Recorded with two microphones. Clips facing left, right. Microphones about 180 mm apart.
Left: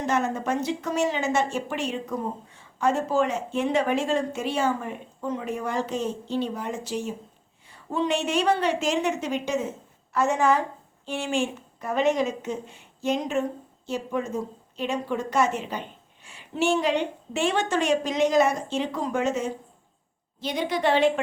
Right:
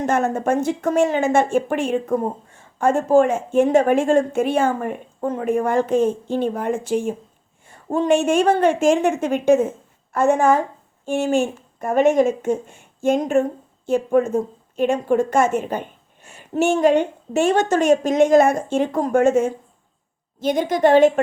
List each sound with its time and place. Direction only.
0.0 s speech: 50° right (ahead or behind)